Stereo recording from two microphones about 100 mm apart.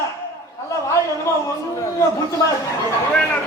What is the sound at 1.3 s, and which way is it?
Speech, 25° left (ahead or behind).